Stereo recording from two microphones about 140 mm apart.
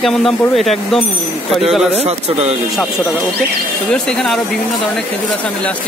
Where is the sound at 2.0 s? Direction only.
50° right (ahead or behind).